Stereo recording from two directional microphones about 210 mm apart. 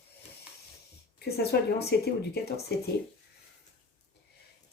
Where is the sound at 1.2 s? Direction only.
50° left (ahead or behind).